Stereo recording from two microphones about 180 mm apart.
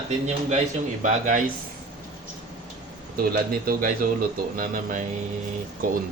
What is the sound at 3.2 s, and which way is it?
A man's voice, 55° right (ahead or behind).